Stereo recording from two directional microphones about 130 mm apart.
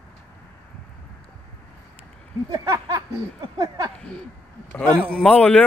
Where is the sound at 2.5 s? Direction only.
25° right (ahead or behind).